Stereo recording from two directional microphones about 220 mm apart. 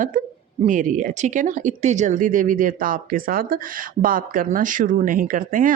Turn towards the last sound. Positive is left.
turn(degrees=-40)  # may be behind; listen again after turning